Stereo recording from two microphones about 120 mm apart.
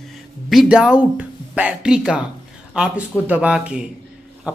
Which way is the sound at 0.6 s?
10° right (ahead or behind).